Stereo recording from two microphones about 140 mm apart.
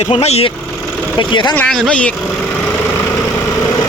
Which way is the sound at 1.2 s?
35° left (ahead or behind).